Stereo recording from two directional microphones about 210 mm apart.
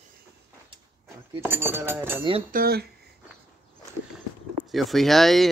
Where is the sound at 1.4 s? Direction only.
10° right (ahead or behind).